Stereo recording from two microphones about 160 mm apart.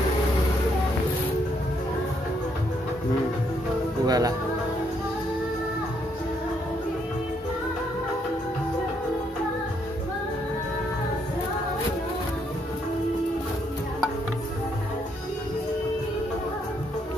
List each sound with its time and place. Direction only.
4.0 s speech: 25° right (ahead or behind)